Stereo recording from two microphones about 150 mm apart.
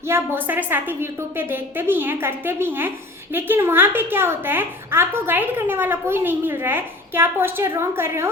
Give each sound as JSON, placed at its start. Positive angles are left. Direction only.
{"t": 0.1, "sound": "a woman's voice", "side_deg": -15}